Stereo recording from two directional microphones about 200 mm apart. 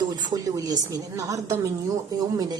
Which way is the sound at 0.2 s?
20° right (ahead or behind).